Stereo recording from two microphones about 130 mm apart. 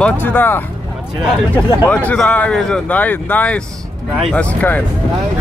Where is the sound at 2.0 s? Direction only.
10° left (ahead or behind).